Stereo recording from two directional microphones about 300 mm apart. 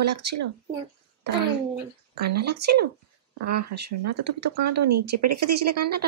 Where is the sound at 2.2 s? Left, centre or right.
Right.